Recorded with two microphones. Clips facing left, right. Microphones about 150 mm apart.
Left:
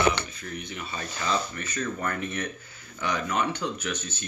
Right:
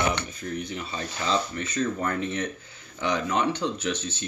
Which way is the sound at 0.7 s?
25° right (ahead or behind).